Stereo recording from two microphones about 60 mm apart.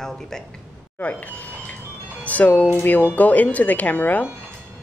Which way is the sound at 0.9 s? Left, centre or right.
Left.